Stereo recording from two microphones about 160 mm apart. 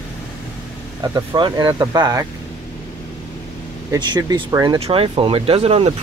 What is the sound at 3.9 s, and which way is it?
Speech, 25° right (ahead or behind).